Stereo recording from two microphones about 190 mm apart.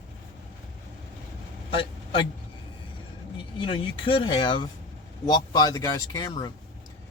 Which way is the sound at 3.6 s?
30° left (ahead or behind).